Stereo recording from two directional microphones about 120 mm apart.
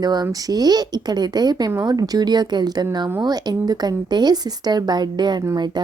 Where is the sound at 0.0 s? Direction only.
35° right (ahead or behind).